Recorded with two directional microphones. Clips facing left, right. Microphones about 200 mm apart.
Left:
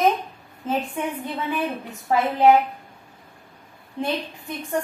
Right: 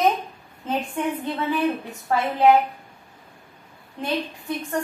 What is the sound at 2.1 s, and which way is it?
Speech, 15° left (ahead or behind).